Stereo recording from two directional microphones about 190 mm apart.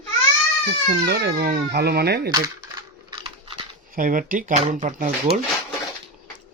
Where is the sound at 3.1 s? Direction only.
25° right (ahead or behind).